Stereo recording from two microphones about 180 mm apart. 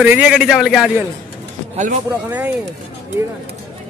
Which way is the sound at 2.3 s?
10° right (ahead or behind).